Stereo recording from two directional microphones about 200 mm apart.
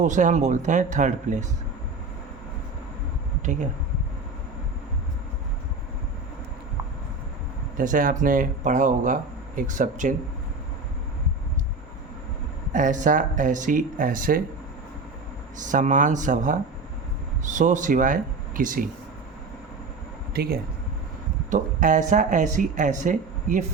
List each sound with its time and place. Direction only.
0.0 s speech: 40° right (ahead or behind)
7.8 s speech: 45° right (ahead or behind)
12.7 s speech: 40° right (ahead or behind)
15.6 s speech: 40° right (ahead or behind)
20.3 s speech: 50° right (ahead or behind)